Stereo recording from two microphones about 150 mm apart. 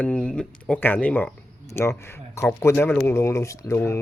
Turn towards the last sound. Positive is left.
turn(degrees=15)  # may be behind; listen again after turning